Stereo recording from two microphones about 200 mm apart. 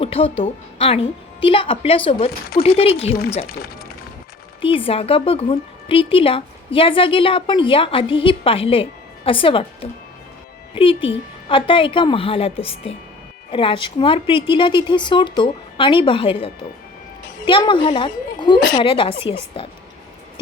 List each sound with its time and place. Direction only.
0.0 s a woman's voice: 30° left (ahead or behind)
4.6 s a woman's voice: 25° left (ahead or behind)